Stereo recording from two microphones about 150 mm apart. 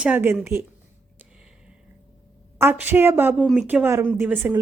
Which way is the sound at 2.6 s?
15° right (ahead or behind).